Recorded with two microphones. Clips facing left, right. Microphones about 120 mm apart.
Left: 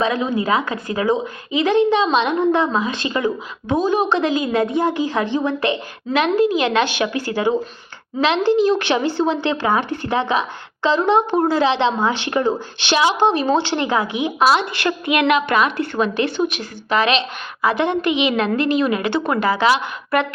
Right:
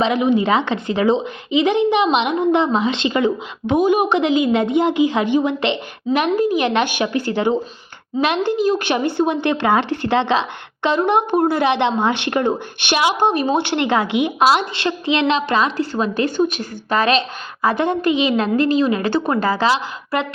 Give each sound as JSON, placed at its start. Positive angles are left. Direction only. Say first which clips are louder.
{"t": 0.0, "sound": "a woman's voice", "louder": "right 3 dB", "side_deg": -20}
{"t": 7.3, "sound": "speech", "louder": "right 2 dB", "side_deg": 25}
{"t": 8.9, "sound": "speech", "louder": "even", "side_deg": -55}
{"t": 10.8, "sound": "a woman's voice", "louder": "left 1 dB", "side_deg": -60}
{"t": 13.6, "sound": "speech", "louder": "right 1 dB", "side_deg": -60}
{"t": 14.8, "sound": "a woman's voice", "louder": "even", "side_deg": -25}